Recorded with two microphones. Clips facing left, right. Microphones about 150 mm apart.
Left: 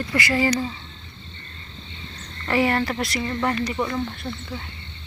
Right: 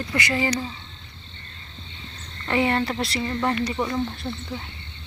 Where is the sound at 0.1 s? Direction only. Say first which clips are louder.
Left 3 dB; 20° right (ahead or behind).